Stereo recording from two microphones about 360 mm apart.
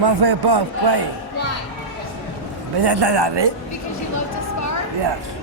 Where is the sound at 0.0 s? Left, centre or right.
Right.